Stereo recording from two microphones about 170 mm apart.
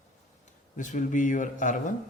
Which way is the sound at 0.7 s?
45° left (ahead or behind).